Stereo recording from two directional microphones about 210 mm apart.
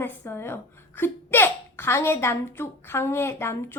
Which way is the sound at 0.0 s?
10° left (ahead or behind).